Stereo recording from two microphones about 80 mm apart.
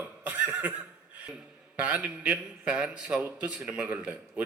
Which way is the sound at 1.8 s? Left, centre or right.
Centre.